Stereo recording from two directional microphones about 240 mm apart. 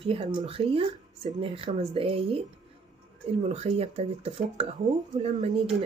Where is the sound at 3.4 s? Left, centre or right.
Right.